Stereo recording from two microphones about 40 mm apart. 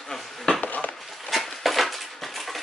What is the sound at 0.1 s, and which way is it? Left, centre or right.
Bee, centre.